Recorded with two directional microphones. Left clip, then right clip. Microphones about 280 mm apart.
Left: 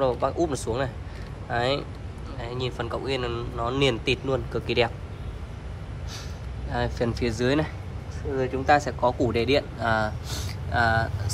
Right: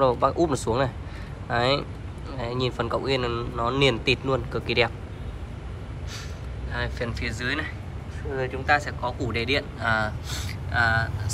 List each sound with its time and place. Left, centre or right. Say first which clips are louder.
0.0 s speech: right 3 dB; centre
6.7 s speech: left 3 dB; centre
8.6 s speech: left 3 dB; left